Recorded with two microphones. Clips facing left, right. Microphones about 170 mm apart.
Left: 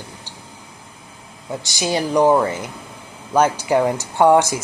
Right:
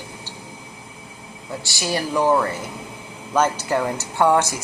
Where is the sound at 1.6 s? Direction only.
20° left (ahead or behind).